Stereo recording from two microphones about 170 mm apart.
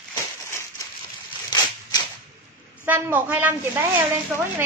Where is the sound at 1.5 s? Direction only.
25° left (ahead or behind).